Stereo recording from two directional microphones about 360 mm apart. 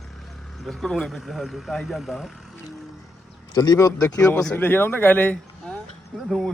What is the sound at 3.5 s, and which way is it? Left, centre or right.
Speech, centre.